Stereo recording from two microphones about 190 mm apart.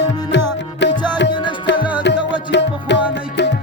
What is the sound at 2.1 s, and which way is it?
Music, 65° left (ahead or behind).